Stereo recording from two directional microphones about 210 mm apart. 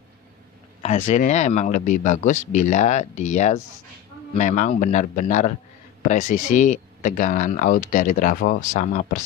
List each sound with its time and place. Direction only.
0.8 s speech: 35° left (ahead or behind)